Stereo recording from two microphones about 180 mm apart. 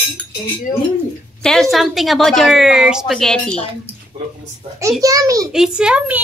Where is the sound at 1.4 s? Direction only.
Centre (ahead or behind).